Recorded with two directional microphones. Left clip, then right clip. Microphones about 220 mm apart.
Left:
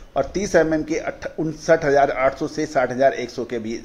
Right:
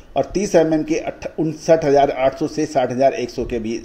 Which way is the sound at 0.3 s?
20° right (ahead or behind).